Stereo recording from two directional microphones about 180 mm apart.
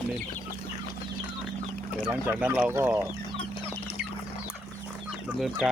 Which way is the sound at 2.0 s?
10° right (ahead or behind).